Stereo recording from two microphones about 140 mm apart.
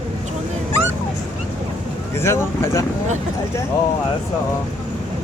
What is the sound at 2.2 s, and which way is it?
Speech, 20° left (ahead or behind).